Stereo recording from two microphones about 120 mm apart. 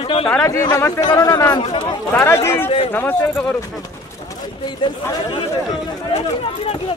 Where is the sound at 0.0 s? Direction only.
50° left (ahead or behind).